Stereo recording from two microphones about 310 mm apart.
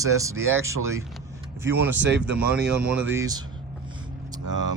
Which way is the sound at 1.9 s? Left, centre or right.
Right.